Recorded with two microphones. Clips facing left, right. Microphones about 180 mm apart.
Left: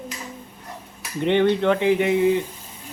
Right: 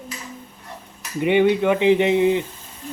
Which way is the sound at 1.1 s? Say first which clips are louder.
Right 2 dB; 10° right (ahead or behind).